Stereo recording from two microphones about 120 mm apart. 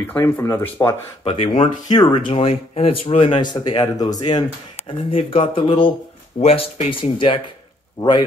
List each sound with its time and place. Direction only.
0.0 s speech: 20° left (ahead or behind)
1.2 s speech: 50° left (ahead or behind)
1.9 s speech: 35° left (ahead or behind)
2.3 s speech: 55° left (ahead or behind)
6.4 s speech: 55° left (ahead or behind)